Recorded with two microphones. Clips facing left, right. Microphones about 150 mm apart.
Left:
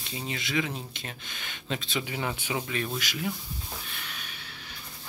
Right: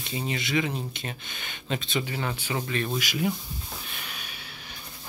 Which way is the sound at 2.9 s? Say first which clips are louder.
Right 5 dB; 15° right (ahead or behind).